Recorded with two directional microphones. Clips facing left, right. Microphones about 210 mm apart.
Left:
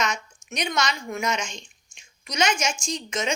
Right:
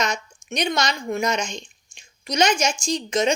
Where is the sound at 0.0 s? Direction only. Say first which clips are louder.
Right 2 dB; 35° right (ahead or behind).